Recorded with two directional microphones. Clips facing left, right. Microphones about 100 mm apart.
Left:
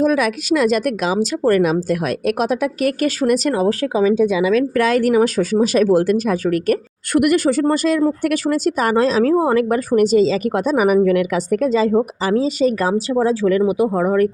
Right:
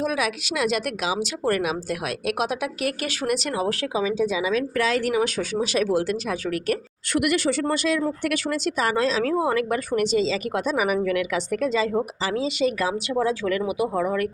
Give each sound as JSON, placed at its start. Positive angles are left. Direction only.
{"t": 0.0, "sound": "a woman's voice", "side_deg": 45}